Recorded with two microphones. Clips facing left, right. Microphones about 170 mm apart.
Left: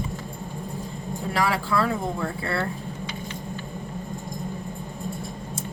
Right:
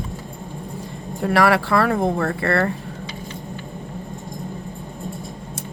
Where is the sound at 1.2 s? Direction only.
70° right (ahead or behind).